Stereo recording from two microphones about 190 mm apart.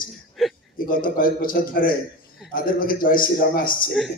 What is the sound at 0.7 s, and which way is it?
A man's voice, 50° left (ahead or behind).